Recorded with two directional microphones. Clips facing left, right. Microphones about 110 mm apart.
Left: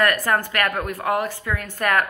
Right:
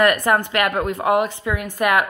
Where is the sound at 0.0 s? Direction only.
20° right (ahead or behind).